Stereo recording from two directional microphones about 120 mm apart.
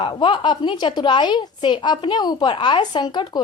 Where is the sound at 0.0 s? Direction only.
45° left (ahead or behind).